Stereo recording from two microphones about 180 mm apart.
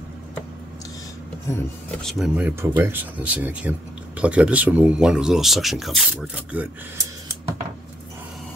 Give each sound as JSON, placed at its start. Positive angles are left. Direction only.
{"t": 1.5, "sound": "speech", "side_deg": 5}